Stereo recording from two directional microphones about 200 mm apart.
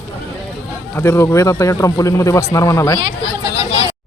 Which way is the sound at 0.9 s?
10° left (ahead or behind).